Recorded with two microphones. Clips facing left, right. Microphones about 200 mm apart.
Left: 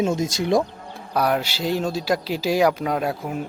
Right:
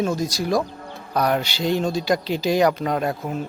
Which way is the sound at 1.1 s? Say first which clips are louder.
Even; 5° left (ahead or behind).